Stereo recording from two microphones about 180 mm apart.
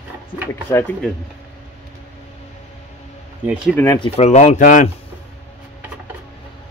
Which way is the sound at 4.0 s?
35° left (ahead or behind).